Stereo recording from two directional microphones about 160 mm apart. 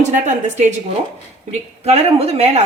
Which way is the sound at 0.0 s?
50° right (ahead or behind).